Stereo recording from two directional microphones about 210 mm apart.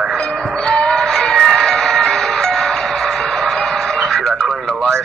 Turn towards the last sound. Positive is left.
turn(degrees=5)  # may be behind; listen again after turning